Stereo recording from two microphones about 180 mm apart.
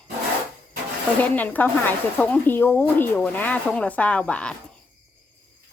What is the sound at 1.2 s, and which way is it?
Speech, 10° left (ahead or behind).